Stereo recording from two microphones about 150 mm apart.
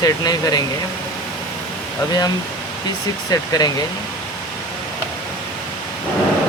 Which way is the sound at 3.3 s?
25° left (ahead or behind).